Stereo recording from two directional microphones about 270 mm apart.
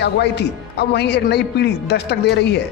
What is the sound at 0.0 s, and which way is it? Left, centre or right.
Speech, left.